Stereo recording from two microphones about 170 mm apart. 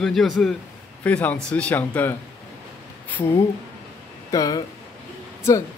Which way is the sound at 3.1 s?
10° left (ahead or behind).